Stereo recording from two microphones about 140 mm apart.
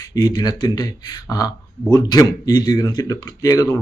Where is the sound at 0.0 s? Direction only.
25° left (ahead or behind).